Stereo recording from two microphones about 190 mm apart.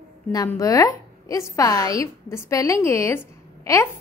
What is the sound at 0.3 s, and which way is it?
A woman's voice, 20° left (ahead or behind).